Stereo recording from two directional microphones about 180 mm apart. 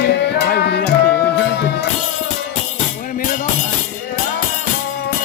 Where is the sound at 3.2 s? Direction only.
50° left (ahead or behind).